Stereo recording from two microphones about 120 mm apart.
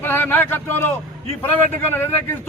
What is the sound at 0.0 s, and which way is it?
A man's voice, 15° left (ahead or behind).